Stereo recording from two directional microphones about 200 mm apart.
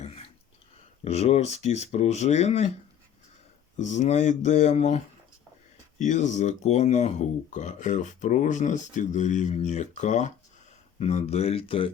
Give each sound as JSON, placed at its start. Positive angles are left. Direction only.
{"t": 1.0, "sound": "speech", "side_deg": 30}
{"t": 3.8, "sound": "speech", "side_deg": 35}